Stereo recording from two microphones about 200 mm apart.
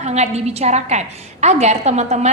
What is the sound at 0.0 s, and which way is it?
A woman's voice, 35° right (ahead or behind).